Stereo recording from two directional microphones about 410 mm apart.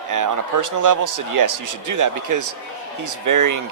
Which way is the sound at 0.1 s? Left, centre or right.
Right.